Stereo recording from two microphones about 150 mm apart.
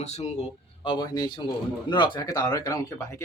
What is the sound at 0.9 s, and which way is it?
Speech, 30° left (ahead or behind).